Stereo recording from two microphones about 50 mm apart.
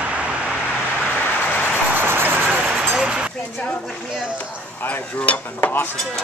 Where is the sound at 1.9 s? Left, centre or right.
Right.